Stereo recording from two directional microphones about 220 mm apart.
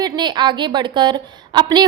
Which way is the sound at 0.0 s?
20° right (ahead or behind).